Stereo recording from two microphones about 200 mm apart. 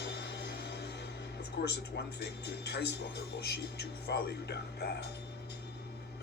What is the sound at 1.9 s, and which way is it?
Speech, 55° left (ahead or behind).